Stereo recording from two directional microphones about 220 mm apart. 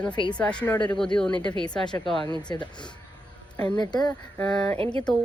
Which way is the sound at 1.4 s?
20° left (ahead or behind).